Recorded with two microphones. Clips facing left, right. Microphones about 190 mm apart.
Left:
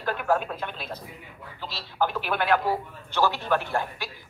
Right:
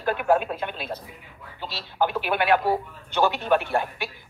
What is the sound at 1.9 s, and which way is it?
A man's voice, 20° right (ahead or behind).